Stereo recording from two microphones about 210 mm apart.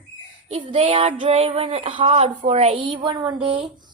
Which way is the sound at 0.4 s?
30° right (ahead or behind).